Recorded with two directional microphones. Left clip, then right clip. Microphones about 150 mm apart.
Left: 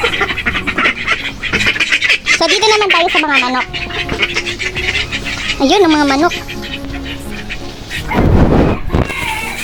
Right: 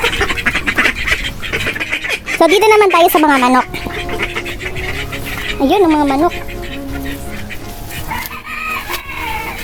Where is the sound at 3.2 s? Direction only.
60° right (ahead or behind).